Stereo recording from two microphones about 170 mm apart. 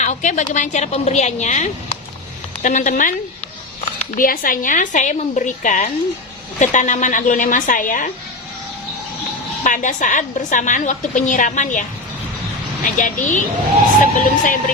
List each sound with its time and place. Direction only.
0.0 s a woman's voice: 45° left (ahead or behind)
4.2 s a woman's voice: 55° left (ahead or behind)
9.6 s a woman's voice: 50° left (ahead or behind)
13.0 s a woman's voice: 50° left (ahead or behind)